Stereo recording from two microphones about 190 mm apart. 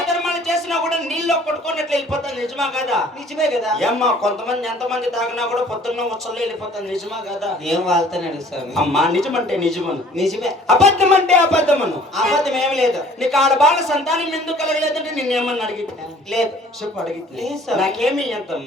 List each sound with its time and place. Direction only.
0.0 s speech: centre (ahead or behind)
10.8 s speech: 35° right (ahead or behind)
12.1 s speech: centre (ahead or behind)